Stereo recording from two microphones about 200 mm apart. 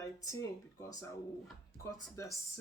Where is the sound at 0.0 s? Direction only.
15° left (ahead or behind).